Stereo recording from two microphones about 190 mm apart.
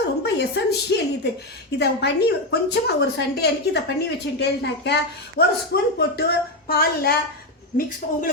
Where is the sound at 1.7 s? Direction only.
60° left (ahead or behind).